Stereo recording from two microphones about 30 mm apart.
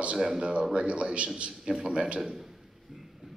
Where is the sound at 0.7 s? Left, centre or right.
Right.